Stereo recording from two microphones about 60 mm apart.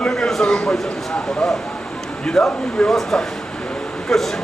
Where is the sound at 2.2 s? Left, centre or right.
Centre.